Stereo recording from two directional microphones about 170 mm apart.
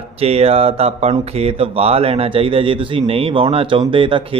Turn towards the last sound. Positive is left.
turn(degrees=-30)  # may be behind; listen again after turning